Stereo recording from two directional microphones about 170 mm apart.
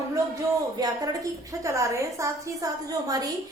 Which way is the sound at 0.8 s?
25° right (ahead or behind).